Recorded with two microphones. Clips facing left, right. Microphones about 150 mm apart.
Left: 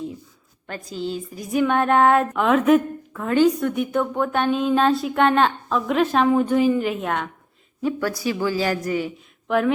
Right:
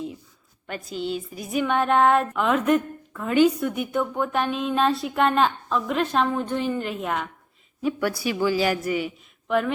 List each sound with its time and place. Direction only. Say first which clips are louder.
0.9 s a woman's voice: left 1 dB; 40° left (ahead or behind)
1.5 s a woman's voice: left 3 dB; centre (ahead or behind)
3.2 s a woman's voice: left 1 dB; 10° right (ahead or behind)
9.5 s a woman's voice: left 3 dB; centre (ahead or behind)